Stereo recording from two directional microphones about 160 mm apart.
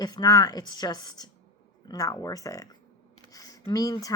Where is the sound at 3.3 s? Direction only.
20° left (ahead or behind).